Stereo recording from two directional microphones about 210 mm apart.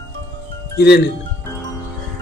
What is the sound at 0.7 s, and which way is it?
Speech, 50° left (ahead or behind).